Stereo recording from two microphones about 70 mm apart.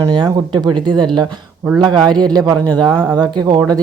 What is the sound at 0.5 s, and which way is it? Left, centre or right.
Speech, right.